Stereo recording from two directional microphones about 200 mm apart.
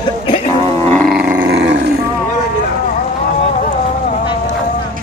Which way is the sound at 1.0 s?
5° right (ahead or behind).